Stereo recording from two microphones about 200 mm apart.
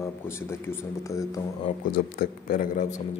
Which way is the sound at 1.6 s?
45° left (ahead or behind).